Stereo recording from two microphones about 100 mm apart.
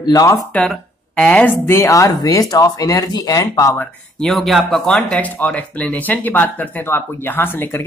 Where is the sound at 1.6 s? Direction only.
30° left (ahead or behind).